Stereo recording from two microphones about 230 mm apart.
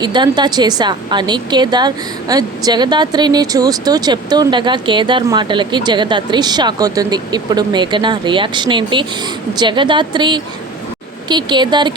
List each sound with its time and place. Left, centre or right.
0.0 s a woman's voice: centre